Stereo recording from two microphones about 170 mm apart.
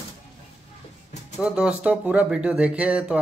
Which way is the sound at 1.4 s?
5° right (ahead or behind).